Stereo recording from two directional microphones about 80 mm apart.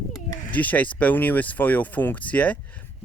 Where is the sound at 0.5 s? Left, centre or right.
Centre.